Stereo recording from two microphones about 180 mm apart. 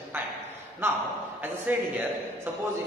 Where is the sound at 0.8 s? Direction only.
10° right (ahead or behind).